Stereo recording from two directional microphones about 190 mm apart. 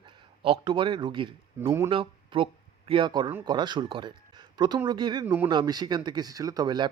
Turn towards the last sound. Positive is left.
turn(degrees=-20)  # may be behind; listen again after turning